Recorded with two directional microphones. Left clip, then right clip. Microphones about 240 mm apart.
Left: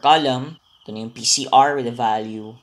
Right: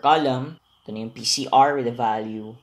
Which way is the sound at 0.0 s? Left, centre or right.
Centre.